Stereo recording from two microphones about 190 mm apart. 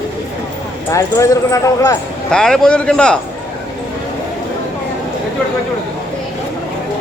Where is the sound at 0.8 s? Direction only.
15° left (ahead or behind).